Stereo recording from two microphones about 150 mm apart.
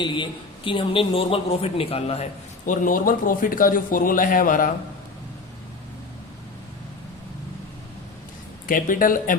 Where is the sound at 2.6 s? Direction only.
65° left (ahead or behind).